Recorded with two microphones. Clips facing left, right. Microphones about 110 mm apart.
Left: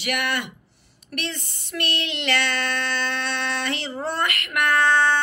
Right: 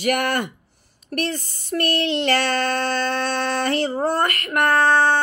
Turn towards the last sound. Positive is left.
turn(degrees=-35)  # may be behind; listen again after turning